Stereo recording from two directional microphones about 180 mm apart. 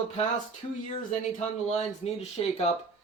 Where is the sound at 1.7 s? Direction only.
40° left (ahead or behind).